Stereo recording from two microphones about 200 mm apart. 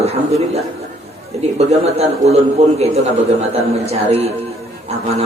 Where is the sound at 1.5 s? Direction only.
30° right (ahead or behind).